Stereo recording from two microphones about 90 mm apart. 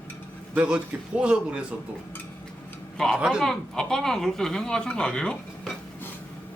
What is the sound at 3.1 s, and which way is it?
Speech, 10° right (ahead or behind).